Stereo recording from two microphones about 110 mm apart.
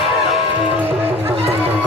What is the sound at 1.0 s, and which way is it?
Run, 65° right (ahead or behind).